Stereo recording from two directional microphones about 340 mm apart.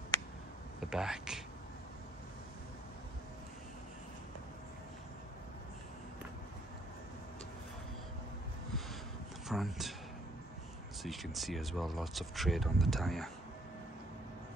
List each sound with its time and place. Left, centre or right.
0.7 s speech: centre
9.5 s a sound: centre
11.0 s speech: centre